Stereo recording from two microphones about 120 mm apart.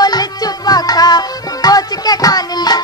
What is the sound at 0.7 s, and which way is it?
Music, 35° left (ahead or behind).